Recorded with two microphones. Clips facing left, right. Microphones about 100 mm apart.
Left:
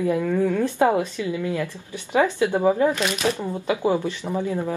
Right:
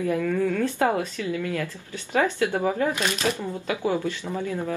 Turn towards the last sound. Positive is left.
turn(degrees=20)  # may be behind; listen again after turning